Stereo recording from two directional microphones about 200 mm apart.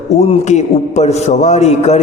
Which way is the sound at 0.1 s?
30° left (ahead or behind).